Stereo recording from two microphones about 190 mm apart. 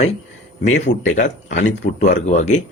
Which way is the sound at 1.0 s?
40° left (ahead or behind).